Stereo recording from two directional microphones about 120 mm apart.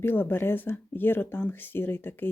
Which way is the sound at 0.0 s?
15° left (ahead or behind).